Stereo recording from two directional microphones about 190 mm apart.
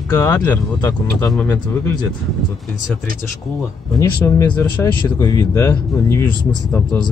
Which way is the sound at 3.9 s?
15° left (ahead or behind).